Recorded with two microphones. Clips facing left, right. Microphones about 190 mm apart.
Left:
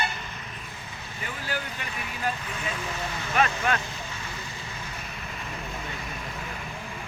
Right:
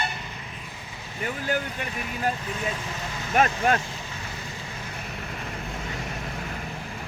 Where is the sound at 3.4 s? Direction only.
40° right (ahead or behind).